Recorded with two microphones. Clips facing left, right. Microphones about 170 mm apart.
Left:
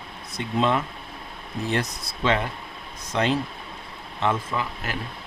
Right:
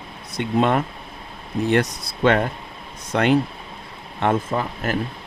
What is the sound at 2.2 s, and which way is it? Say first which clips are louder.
Speech: right 6 dB; 55° right (ahead or behind).